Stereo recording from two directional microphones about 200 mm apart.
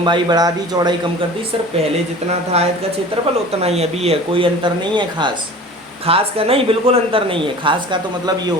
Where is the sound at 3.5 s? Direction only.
30° right (ahead or behind).